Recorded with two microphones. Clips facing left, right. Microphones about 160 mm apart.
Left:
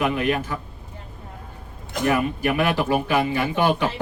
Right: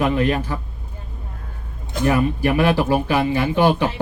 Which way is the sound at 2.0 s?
30° right (ahead or behind).